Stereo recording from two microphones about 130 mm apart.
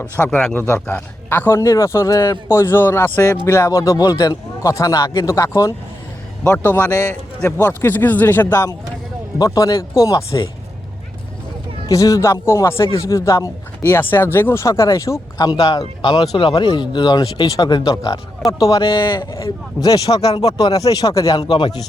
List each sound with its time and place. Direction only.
0.0 s speech: 10° left (ahead or behind)
9.4 s speech: 25° left (ahead or behind)
11.9 s speech: 25° left (ahead or behind)
18.8 s speech: 35° left (ahead or behind)